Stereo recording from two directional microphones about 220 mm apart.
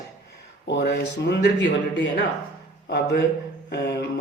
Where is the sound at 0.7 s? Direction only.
50° left (ahead or behind).